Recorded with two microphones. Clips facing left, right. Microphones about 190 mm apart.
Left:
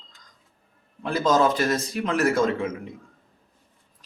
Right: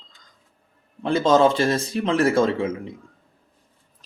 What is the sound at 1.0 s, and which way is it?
Speech, 25° right (ahead or behind).